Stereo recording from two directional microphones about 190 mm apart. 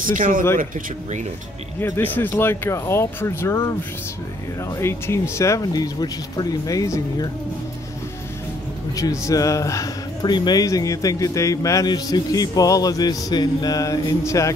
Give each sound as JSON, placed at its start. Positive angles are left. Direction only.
{"t": 0.0, "sound": "speech", "side_deg": -45}
{"t": 1.8, "sound": "speech", "side_deg": 10}
{"t": 4.7, "sound": "speech", "side_deg": 15}
{"t": 8.9, "sound": "speech", "side_deg": 15}